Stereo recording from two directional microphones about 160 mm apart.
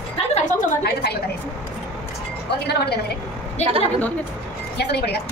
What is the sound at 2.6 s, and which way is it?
Speech, 90° left.